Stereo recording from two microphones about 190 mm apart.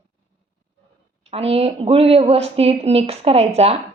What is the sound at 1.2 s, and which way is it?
A woman's voice, 30° right (ahead or behind).